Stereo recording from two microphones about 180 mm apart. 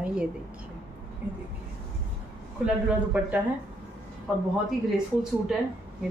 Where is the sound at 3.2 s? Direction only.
10° right (ahead or behind).